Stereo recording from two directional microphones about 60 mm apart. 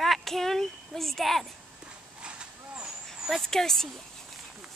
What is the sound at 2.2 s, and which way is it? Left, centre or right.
Vehicle, centre.